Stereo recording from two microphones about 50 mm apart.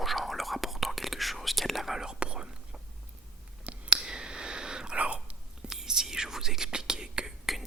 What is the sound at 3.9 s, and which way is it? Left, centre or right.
Whispering, centre.